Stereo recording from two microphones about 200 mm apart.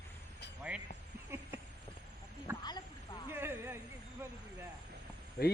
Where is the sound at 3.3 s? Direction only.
10° right (ahead or behind).